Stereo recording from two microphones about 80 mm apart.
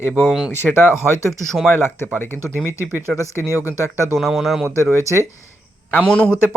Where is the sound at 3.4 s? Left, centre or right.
Right.